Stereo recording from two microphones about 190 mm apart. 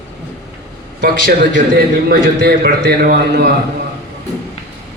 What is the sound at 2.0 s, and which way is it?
A man's voice, 55° right (ahead or behind).